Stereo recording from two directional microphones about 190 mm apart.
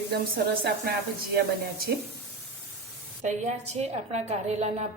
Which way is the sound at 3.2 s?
40° right (ahead or behind).